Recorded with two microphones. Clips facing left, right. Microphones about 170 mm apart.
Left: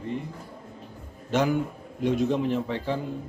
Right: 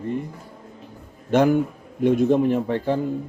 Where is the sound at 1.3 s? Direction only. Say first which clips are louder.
Right 6 dB; 55° right (ahead or behind).